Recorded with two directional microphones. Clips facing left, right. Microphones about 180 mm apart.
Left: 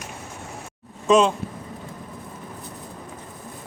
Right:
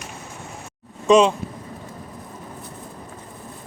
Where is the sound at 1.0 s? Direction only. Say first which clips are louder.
Right 3 dB; centre (ahead or behind).